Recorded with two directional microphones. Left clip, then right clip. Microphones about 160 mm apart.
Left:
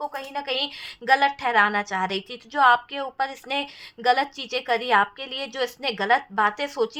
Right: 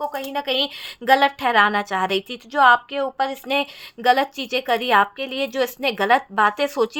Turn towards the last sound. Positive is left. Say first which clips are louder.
# right 4 dB
turn(degrees=-45)  # may be behind; listen again after turning